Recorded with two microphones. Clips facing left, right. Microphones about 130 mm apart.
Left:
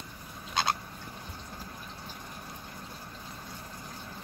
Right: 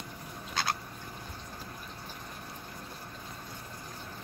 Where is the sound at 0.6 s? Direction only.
20° left (ahead or behind).